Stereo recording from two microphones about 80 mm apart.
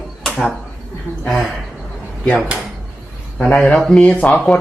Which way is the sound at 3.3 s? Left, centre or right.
Centre.